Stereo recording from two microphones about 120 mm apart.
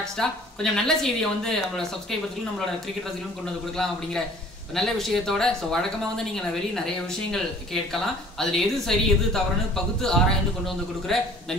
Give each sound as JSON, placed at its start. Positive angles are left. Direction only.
{"t": 0.0, "sound": "speech", "side_deg": 5}
{"t": 3.7, "sound": "speech", "side_deg": 5}
{"t": 7.2, "sound": "speech", "side_deg": 5}
{"t": 11.1, "sound": "speech", "side_deg": 5}